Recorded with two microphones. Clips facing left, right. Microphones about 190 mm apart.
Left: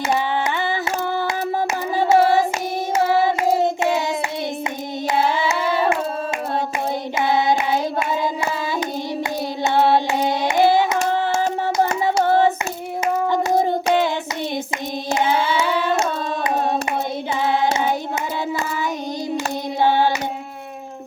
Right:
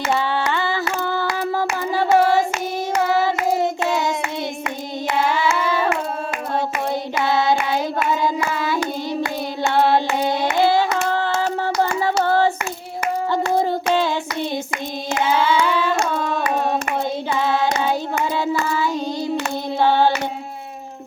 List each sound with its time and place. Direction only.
0.4 s a sound: 20° left (ahead or behind)
2.0 s hands: 20° left (ahead or behind)
2.9 s child singing: 20° left (ahead or behind)
7.2 s hands: 15° left (ahead or behind)
10.2 s hands: 15° left (ahead or behind)
13.6 s child singing: 20° left (ahead or behind)
17.4 s child singing: 20° left (ahead or behind)
19.8 s hands: 15° left (ahead or behind)